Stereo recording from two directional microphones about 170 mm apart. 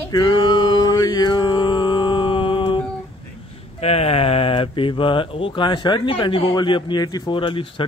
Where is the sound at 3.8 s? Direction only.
35° left (ahead or behind).